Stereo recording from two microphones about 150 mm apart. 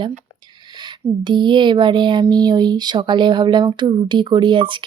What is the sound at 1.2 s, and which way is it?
Speech, 30° right (ahead or behind).